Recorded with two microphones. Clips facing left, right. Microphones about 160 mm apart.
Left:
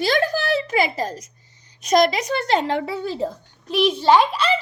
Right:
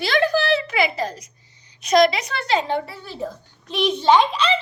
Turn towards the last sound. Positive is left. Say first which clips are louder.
# even
turn(degrees=10)  # may be behind; listen again after turning